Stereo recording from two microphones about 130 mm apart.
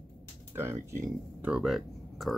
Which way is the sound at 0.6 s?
20° right (ahead or behind).